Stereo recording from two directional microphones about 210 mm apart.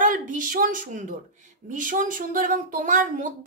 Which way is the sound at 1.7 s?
40° right (ahead or behind).